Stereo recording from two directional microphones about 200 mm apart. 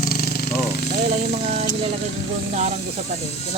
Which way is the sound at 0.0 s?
50° left (ahead or behind).